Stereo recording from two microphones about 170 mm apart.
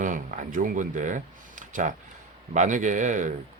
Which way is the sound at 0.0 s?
50° right (ahead or behind).